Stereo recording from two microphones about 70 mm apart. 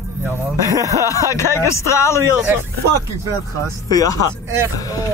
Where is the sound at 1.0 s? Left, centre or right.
Left.